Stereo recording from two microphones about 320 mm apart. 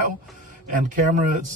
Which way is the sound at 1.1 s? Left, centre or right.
Right.